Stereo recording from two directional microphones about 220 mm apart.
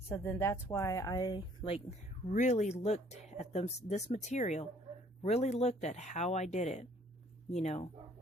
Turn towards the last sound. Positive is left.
turn(degrees=30)  # may be behind; listen again after turning